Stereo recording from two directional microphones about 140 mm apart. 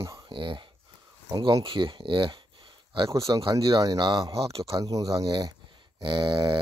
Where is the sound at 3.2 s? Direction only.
25° right (ahead or behind).